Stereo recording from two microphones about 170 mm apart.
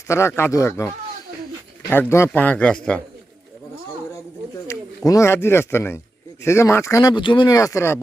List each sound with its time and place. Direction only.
0.1 s speech: 15° left (ahead or behind)
1.9 s speech: 15° left (ahead or behind)
4.7 s speech: 20° left (ahead or behind)